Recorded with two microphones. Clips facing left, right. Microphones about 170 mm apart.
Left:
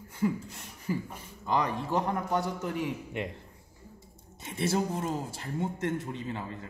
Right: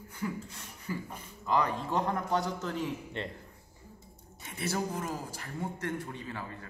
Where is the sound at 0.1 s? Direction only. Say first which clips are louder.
Left 7 dB; 25° left (ahead or behind).